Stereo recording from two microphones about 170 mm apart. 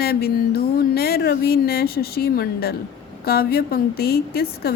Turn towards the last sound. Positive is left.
turn(degrees=65)  # may be behind; listen again after turning